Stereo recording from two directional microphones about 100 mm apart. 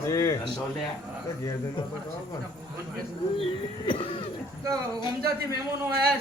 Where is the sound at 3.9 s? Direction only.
65° left (ahead or behind).